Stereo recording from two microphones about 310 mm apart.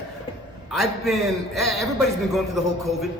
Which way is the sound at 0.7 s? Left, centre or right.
Centre.